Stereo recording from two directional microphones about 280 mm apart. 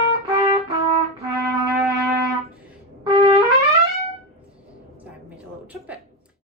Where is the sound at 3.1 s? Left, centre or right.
Right.